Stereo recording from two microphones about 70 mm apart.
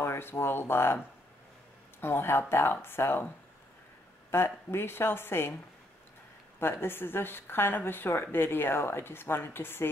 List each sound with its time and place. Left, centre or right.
0.0 s speech: left
4.3 s speech: left
6.6 s speech: left